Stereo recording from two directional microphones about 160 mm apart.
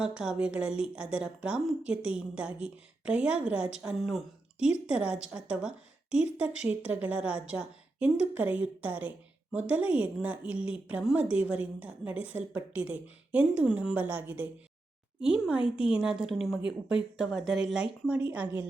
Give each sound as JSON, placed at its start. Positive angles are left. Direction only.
{"t": 0.0, "sound": "a woman's voice", "side_deg": -5}